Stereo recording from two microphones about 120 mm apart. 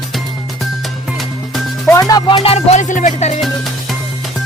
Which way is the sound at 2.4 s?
55° left (ahead or behind).